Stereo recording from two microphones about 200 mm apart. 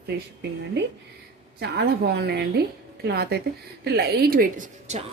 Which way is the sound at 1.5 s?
55° right (ahead or behind).